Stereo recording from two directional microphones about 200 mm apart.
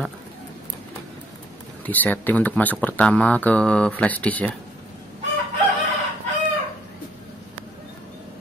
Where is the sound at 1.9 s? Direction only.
10° left (ahead or behind).